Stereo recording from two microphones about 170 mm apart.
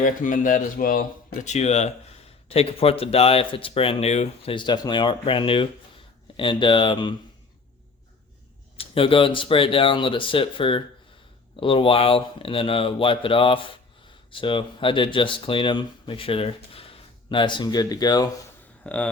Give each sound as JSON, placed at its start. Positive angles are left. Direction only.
{"t": 0.0, "sound": "speech", "side_deg": 50}
{"t": 4.5, "sound": "speech", "side_deg": 25}
{"t": 8.8, "sound": "speech", "side_deg": 30}
{"t": 18.8, "sound": "speech", "side_deg": 10}